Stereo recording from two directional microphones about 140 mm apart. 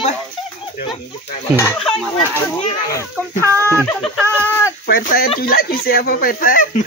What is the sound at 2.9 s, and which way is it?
Speech, 20° left (ahead or behind).